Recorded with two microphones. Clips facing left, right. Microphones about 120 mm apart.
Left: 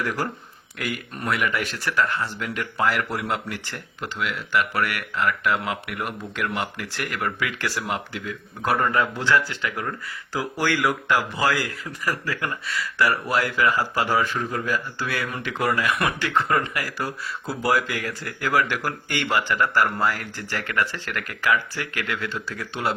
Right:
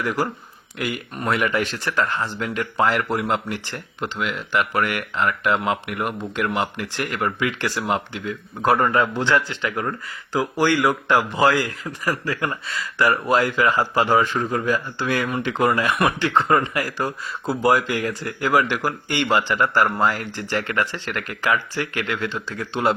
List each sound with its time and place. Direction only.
0.0 s speech: 15° right (ahead or behind)
1.3 s speech: 30° right (ahead or behind)
10.3 s a man's voice: 15° right (ahead or behind)